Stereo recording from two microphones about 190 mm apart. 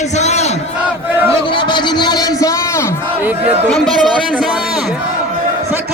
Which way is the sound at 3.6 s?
Centre (ahead or behind).